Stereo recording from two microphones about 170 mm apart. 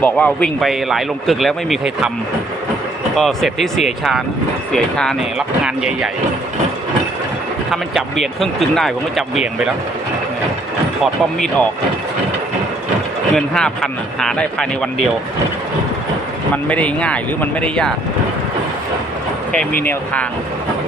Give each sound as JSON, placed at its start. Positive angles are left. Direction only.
{"t": 0.0, "sound": "a man's voice", "side_deg": 10}
{"t": 3.2, "sound": "a man's voice", "side_deg": 0}
{"t": 7.7, "sound": "a man's voice", "side_deg": 0}
{"t": 11.0, "sound": "a man's voice", "side_deg": 5}
{"t": 13.3, "sound": "a man's voice", "side_deg": 5}
{"t": 16.6, "sound": "speech", "side_deg": 10}
{"t": 19.8, "sound": "speech", "side_deg": 10}